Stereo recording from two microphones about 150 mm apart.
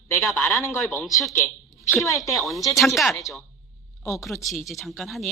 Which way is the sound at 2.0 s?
20° left (ahead or behind).